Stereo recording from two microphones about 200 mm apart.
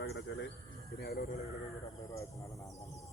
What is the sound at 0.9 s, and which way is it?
Speech, 50° left (ahead or behind).